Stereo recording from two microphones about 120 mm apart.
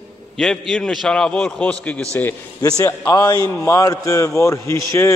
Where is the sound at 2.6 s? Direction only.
30° left (ahead or behind).